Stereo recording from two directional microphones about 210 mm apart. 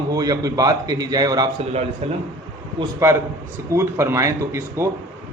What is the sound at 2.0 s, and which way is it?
Speech, 30° right (ahead or behind).